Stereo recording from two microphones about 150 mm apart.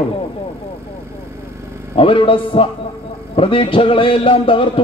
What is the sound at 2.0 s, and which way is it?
A man's voice, 35° left (ahead or behind).